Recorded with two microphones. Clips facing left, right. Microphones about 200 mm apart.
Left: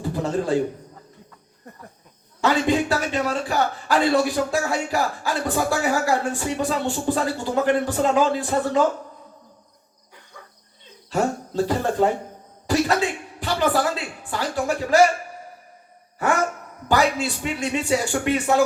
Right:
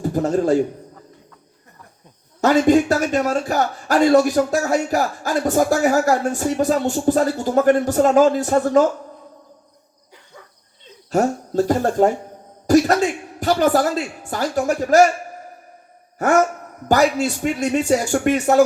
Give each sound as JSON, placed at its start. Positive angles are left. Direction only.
{"t": 0.0, "sound": "a sound", "side_deg": -45}
{"t": 2.4, "sound": "speech", "side_deg": -45}
{"t": 11.1, "sound": "speech", "side_deg": -45}
{"t": 16.9, "sound": "speech", "side_deg": -45}